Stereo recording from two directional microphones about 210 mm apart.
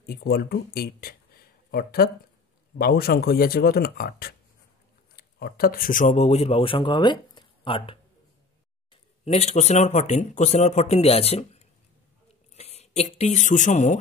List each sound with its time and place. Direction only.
0.0 s speech: 45° left (ahead or behind); by 8.0 s 25° left (ahead or behind)
9.2 s speech: 30° left (ahead or behind)